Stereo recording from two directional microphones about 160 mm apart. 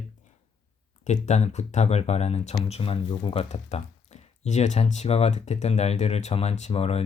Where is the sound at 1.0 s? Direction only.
45° left (ahead or behind).